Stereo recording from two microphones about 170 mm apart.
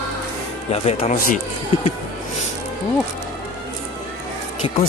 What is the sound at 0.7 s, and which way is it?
Speech, 40° left (ahead or behind).